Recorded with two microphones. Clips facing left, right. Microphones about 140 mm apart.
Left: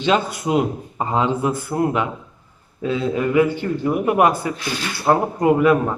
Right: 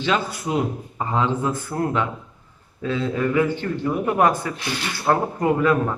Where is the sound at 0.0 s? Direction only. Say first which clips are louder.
Left 4 dB; 20° left (ahead or behind).